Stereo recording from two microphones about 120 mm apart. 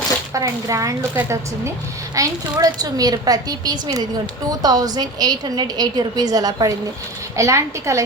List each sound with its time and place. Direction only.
0.3 s a woman's voice: 30° right (ahead or behind)